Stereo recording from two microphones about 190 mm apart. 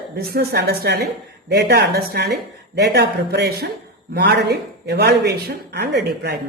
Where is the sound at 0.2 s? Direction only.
55° right (ahead or behind).